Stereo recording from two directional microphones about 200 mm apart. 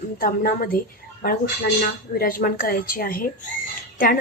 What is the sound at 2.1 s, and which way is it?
A woman's voice, 45° left (ahead or behind).